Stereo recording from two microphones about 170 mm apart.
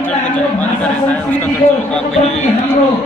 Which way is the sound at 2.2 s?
40° left (ahead or behind).